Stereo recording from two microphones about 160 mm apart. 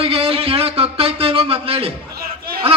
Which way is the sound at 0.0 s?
35° right (ahead or behind).